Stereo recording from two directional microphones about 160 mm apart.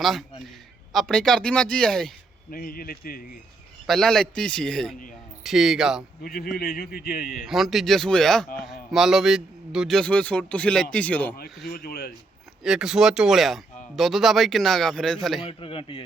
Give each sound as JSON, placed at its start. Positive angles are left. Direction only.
{"t": 0.0, "sound": "a sound", "side_deg": 0}
{"t": 0.9, "sound": "speech", "side_deg": 0}
{"t": 2.5, "sound": "speech", "side_deg": 65}
{"t": 3.8, "sound": "speech", "side_deg": 0}
{"t": 6.2, "sound": "speech", "side_deg": 70}
{"t": 7.4, "sound": "speech", "side_deg": 0}
{"t": 11.6, "sound": "speech", "side_deg": 70}
{"t": 12.6, "sound": "speech", "side_deg": -5}
{"t": 15.4, "sound": "a man's voice", "side_deg": 35}